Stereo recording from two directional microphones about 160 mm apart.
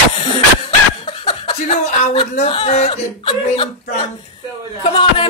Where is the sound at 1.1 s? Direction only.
30° left (ahead or behind).